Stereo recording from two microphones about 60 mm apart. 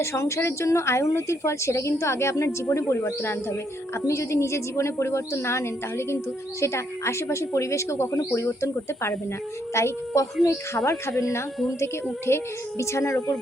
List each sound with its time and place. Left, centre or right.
0.0 s a woman's voice: left
3.9 s a woman's voice: left